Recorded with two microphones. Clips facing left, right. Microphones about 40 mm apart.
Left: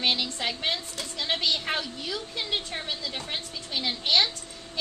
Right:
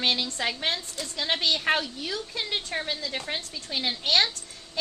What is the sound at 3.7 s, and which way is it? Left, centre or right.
Child singing, right.